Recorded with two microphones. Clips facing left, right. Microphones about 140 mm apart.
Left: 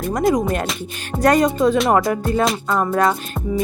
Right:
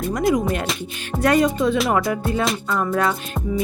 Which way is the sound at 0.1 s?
40° left (ahead or behind).